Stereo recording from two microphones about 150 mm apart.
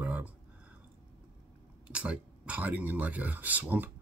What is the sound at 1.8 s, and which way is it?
Speech, 10° right (ahead or behind).